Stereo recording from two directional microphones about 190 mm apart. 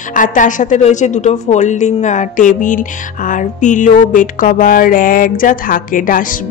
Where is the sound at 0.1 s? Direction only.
45° left (ahead or behind).